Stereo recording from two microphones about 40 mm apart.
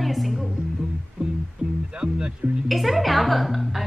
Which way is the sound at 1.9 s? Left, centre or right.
Right.